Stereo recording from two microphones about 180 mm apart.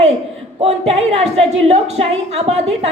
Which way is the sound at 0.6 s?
35° right (ahead or behind).